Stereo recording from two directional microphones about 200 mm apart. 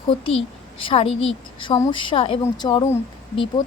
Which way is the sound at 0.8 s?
25° left (ahead or behind).